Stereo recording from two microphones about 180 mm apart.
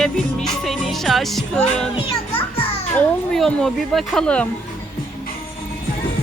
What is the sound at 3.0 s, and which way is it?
Music, 5° left (ahead or behind).